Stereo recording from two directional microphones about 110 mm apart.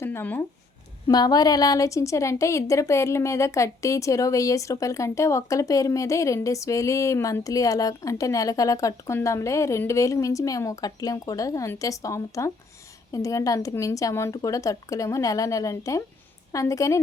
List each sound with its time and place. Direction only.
0.0 s speech: 20° left (ahead or behind)
1.0 s a woman's voice: 35° left (ahead or behind)